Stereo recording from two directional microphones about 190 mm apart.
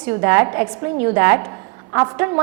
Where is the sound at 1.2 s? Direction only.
15° right (ahead or behind).